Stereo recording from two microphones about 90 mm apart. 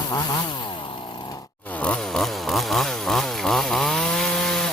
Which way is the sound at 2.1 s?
5° left (ahead or behind).